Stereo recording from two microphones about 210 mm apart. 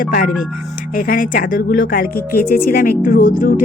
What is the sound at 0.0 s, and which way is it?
A woman's voice, 40° left (ahead or behind).